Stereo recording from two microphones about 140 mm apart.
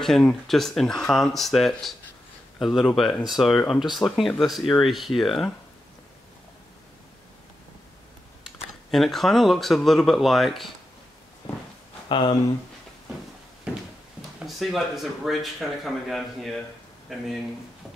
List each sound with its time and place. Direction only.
0.0 s speech: 5° left (ahead or behind)
8.5 s speech: centre (ahead or behind)
12.1 s speech: 35° left (ahead or behind)
14.4 s speech: centre (ahead or behind)